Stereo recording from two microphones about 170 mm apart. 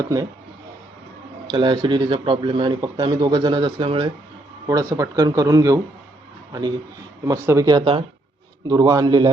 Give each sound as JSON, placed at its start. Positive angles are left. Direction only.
{"t": 0.0, "sound": "speech", "side_deg": -20}
{"t": 1.5, "sound": "a man's voice", "side_deg": -25}